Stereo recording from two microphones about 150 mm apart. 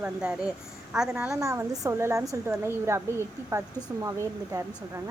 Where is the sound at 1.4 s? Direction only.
20° right (ahead or behind).